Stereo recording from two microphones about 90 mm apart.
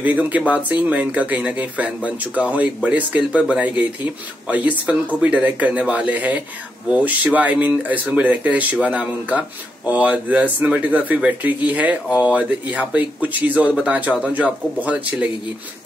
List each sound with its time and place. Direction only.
0.5 s speech: 15° right (ahead or behind)